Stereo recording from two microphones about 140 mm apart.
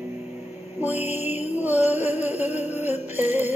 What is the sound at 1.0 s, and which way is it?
Music, 50° left (ahead or behind).